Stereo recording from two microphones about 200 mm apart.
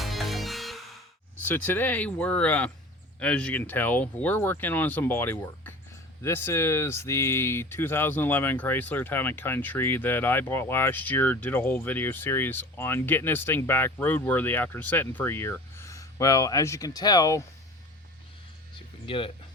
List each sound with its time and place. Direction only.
0.0 s music: centre (ahead or behind)
1.5 s speech: 10° left (ahead or behind)
19.0 s speech: 25° left (ahead or behind)